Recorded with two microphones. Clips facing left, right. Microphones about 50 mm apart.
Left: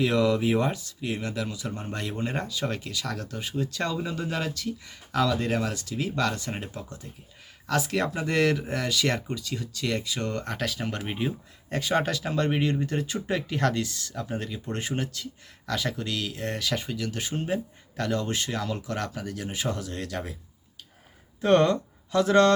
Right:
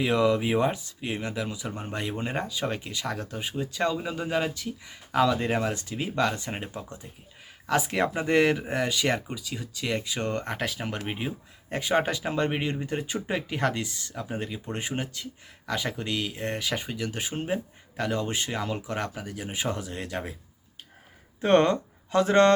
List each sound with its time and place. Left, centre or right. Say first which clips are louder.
0.0 s speech: even; centre
21.4 s speech: even; right